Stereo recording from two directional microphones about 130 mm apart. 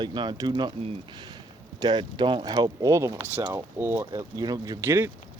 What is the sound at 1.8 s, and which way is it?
Speech, 35° right (ahead or behind).